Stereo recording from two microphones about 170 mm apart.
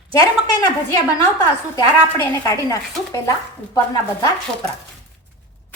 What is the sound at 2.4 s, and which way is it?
Speech, 20° left (ahead or behind).